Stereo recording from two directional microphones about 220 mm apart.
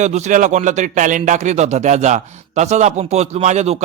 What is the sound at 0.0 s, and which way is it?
A man's voice, 35° right (ahead or behind).